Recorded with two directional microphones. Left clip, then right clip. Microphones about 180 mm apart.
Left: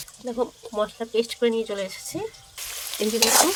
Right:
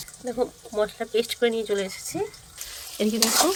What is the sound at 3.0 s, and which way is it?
Speech, 25° right (ahead or behind).